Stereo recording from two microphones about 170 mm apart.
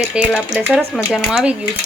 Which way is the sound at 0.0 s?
Centre (ahead or behind).